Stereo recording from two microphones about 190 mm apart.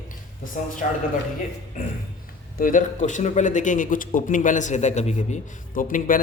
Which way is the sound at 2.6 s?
45° left (ahead or behind).